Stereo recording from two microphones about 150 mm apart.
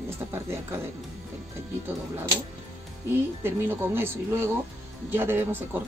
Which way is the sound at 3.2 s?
15° right (ahead or behind).